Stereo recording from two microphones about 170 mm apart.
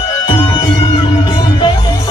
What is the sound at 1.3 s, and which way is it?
Music, 25° left (ahead or behind).